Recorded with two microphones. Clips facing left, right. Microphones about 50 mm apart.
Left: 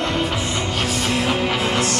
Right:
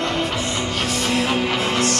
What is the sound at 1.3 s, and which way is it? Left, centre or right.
Music, centre.